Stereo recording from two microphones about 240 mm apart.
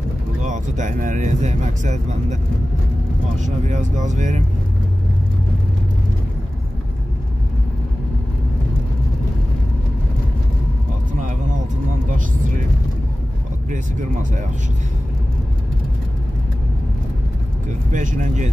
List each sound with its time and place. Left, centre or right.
0.4 s speech: right
3.4 s speech: right
13.7 s speech: right
17.9 s speech: right